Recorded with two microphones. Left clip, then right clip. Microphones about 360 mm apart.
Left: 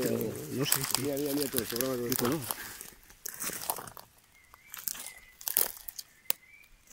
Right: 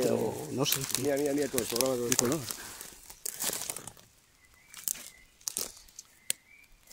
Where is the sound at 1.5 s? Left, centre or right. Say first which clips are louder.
Right 3 dB; centre.